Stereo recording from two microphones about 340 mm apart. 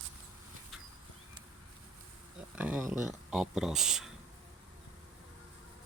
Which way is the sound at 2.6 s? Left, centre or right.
Centre.